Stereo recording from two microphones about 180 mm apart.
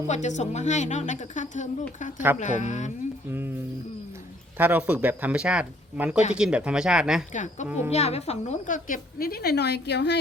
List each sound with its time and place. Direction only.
0.1 s a woman's voice: 40° left (ahead or behind)
3.2 s speech: 10° right (ahead or behind)
4.5 s speech: 10° right (ahead or behind)
7.3 s a woman's voice: 45° left (ahead or behind); by 10.2 s 70° left (ahead or behind)